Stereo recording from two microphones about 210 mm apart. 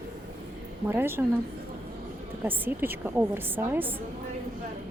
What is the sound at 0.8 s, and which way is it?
Speech, 10° right (ahead or behind).